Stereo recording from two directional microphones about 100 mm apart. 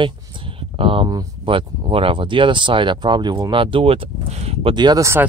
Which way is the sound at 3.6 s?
70° right (ahead or behind).